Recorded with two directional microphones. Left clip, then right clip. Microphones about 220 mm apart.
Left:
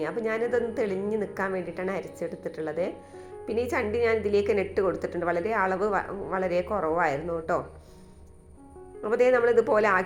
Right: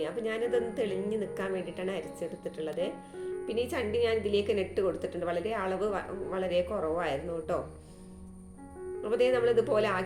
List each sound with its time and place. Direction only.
0.0 s a woman's voice: 15° left (ahead or behind)
9.0 s a woman's voice: 15° left (ahead or behind)